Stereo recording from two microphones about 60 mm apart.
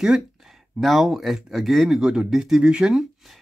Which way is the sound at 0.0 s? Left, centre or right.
Centre.